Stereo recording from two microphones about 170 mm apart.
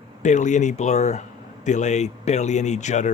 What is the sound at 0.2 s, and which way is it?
Speech, 45° left (ahead or behind).